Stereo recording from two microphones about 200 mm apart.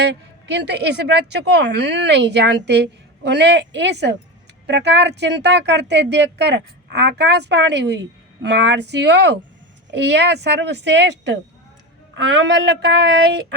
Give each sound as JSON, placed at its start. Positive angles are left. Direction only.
{"t": 0.0, "sound": "speech", "side_deg": -60}